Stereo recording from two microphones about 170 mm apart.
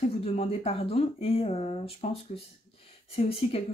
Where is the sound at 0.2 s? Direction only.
35° left (ahead or behind).